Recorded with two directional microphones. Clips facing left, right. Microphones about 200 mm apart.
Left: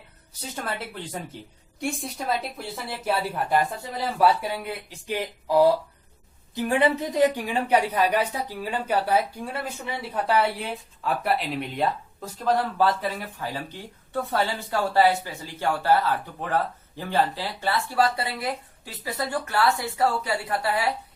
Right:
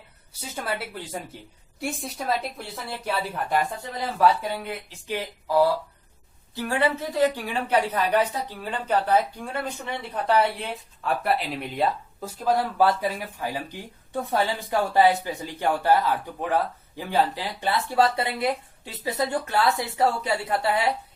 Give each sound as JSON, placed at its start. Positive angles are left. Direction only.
{"t": 0.5, "sound": "a woman's voice", "side_deg": -5}